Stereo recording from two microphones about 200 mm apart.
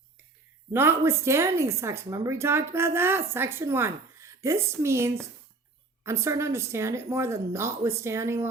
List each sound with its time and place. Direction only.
0.7 s a woman's voice: 10° right (ahead or behind)